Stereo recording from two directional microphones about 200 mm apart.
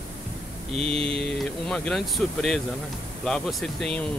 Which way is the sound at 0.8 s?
30° right (ahead or behind).